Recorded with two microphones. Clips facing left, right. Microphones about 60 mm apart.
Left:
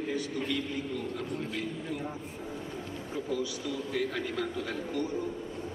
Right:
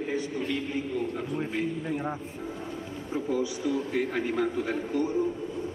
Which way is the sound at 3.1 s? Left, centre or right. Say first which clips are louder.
Right 5 dB; right.